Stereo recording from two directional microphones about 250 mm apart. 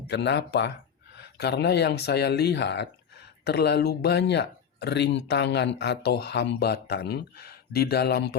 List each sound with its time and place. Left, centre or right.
0.1 s speech: left